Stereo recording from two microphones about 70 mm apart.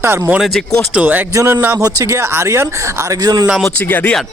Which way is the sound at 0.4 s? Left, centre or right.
Centre.